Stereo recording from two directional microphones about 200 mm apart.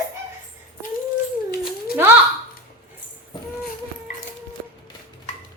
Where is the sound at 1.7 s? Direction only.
10° right (ahead or behind).